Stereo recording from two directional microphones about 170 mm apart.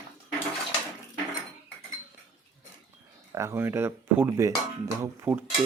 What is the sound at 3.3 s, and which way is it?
Speech, 15° right (ahead or behind).